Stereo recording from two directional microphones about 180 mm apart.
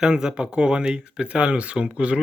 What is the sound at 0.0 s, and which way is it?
Speech, 5° right (ahead or behind).